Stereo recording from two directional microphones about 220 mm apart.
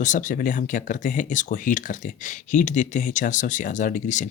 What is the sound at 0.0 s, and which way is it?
Speech, 35° left (ahead or behind).